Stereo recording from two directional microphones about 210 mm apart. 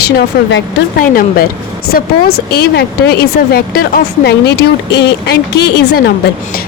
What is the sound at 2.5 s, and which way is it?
A woman's voice, 50° left (ahead or behind).